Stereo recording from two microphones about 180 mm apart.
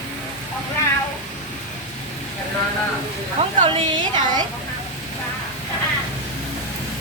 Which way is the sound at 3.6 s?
25° right (ahead or behind).